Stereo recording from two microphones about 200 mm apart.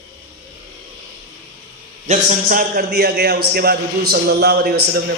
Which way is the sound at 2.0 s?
40° right (ahead or behind).